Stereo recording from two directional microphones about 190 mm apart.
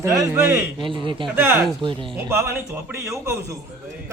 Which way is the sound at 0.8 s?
25° right (ahead or behind).